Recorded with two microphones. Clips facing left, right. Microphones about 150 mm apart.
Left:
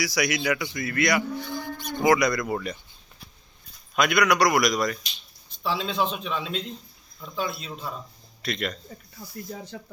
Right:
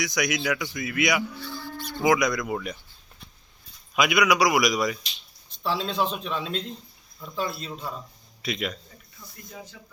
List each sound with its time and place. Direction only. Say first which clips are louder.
0.0 s speech: left 1 dB; 5° left (ahead or behind)
1.4 s livestock: left 3 dB; 15° left (ahead or behind)
2.0 s speech: left 1 dB; centre (ahead or behind)
3.9 s speech: even; 5° right (ahead or behind)
9.5 s speech: left 4 dB; 45° left (ahead or behind)